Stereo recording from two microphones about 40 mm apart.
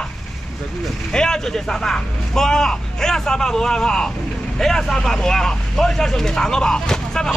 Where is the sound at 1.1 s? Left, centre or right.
Centre.